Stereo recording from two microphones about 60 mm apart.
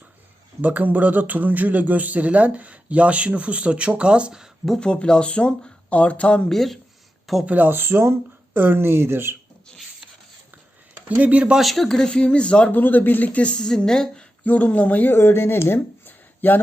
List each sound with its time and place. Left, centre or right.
0.6 s speech: right
4.8 s speech: centre
6.5 s speech: centre
7.4 s speech: right
11.1 s speech: right
11.5 s speech: centre
12.7 s speech: left; by 14.3 s centre
14.4 s speech: left
15.2 s speech: left